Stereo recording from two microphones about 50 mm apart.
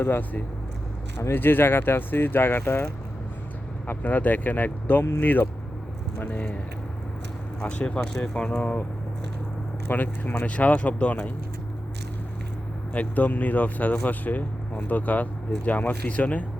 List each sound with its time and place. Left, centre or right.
0.0 s speech: left
3.8 s speech: left
5.0 s speech: left
6.1 s speech: left
7.6 s speech: left
9.9 s speech: left
10.4 s speech: left
12.9 s speech: left